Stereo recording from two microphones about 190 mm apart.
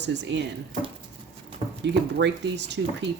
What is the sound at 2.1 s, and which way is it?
Speech, 65° right (ahead or behind).